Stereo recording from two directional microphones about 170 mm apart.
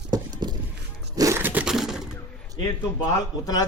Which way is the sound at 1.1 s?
20° right (ahead or behind).